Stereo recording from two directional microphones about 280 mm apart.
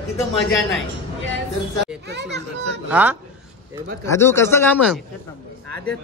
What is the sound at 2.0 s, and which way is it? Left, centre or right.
Speech, right.